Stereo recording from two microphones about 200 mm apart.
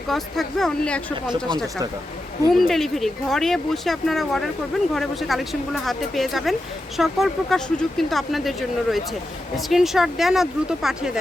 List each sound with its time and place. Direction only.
0.1 s speech: centre (ahead or behind)
2.5 s speech: centre (ahead or behind)